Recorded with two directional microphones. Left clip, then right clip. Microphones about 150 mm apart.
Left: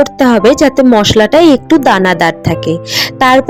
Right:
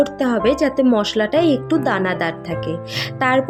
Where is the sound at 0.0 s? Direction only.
60° left (ahead or behind).